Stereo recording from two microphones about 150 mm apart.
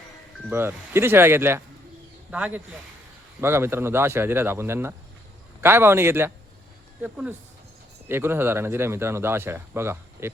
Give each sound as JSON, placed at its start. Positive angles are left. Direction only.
{"t": 0.5, "sound": "speech", "side_deg": -15}